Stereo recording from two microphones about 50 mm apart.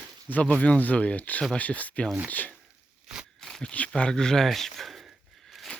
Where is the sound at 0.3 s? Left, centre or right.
Left.